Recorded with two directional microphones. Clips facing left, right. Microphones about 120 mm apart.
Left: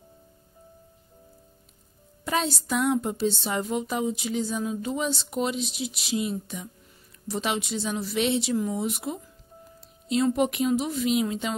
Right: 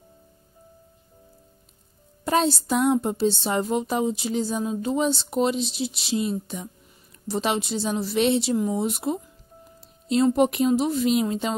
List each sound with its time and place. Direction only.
2.2 s speech: 35° right (ahead or behind)